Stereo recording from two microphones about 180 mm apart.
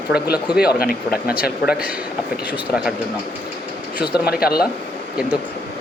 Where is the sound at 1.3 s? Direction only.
5° right (ahead or behind).